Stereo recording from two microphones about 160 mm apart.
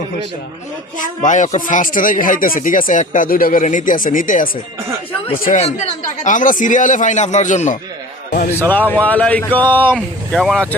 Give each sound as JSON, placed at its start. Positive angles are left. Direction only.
{"t": 1.2, "sound": "speech", "side_deg": 50}
{"t": 5.5, "sound": "a man's voice", "side_deg": 45}
{"t": 8.7, "sound": "speech", "side_deg": 10}
{"t": 9.9, "sound": "speech", "side_deg": 0}